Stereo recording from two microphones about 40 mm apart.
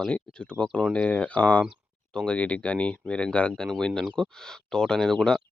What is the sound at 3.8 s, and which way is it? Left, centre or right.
Speech, centre.